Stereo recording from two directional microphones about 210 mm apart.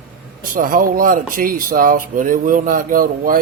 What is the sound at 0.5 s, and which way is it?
Speech, 40° right (ahead or behind).